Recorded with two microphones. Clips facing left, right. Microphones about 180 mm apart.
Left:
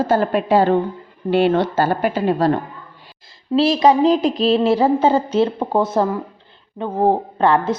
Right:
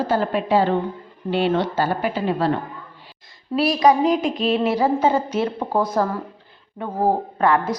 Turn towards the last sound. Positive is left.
turn(degrees=25)  # may be behind; listen again after turning